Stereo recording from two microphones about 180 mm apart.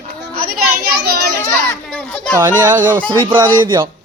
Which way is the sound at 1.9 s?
5° left (ahead or behind).